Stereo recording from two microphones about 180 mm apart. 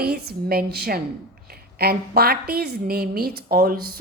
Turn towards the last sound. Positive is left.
turn(degrees=-55)  # may be behind; listen again after turning